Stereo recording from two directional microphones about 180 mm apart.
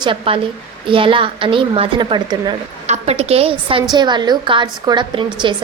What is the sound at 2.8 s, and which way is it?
A woman's voice, 35° right (ahead or behind).